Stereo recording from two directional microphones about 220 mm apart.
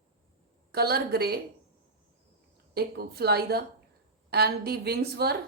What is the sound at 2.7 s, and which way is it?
A woman's voice, 45° right (ahead or behind).